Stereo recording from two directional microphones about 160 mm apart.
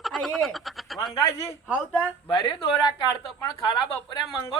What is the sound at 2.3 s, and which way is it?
Speech, 30° left (ahead or behind).